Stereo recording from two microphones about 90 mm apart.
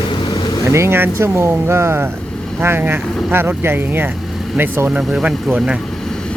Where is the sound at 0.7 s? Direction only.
30° right (ahead or behind).